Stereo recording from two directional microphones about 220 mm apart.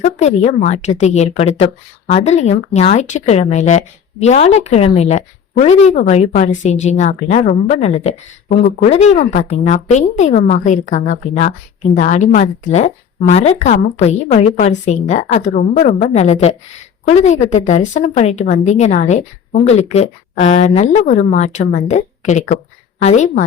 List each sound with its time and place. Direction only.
0.0 s speech: 30° left (ahead or behind)